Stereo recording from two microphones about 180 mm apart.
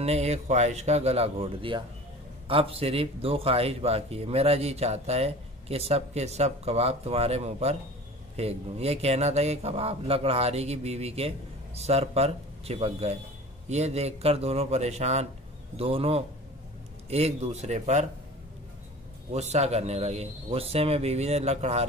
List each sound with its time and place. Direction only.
0.0 s speech: 35° right (ahead or behind)
19.3 s speech: 35° right (ahead or behind)